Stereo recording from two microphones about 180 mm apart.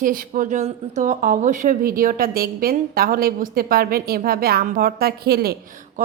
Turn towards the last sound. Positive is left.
turn(degrees=-60)  # may be behind; listen again after turning